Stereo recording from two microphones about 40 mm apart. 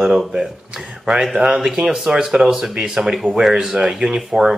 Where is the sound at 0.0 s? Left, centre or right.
Centre.